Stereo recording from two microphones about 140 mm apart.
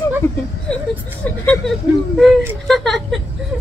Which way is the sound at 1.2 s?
10° left (ahead or behind).